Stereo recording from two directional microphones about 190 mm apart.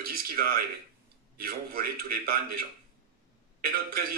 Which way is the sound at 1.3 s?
50° right (ahead or behind).